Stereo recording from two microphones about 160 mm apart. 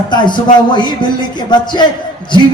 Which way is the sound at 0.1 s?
30° left (ahead or behind).